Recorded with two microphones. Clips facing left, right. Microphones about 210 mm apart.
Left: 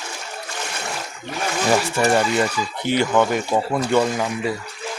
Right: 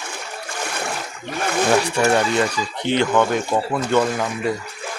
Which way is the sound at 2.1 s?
5° left (ahead or behind).